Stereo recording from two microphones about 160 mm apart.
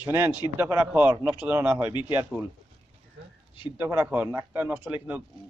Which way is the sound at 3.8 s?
15° right (ahead or behind).